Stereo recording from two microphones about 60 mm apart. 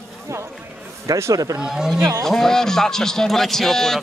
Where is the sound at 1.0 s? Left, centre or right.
Right.